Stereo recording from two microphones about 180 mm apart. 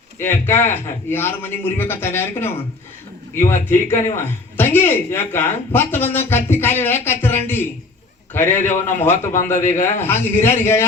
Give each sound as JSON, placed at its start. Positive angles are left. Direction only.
{"t": 0.2, "sound": "a man's voice", "side_deg": 15}
{"t": 9.3, "sound": "a man's voice", "side_deg": 45}
{"t": 10.0, "sound": "a man's voice", "side_deg": 15}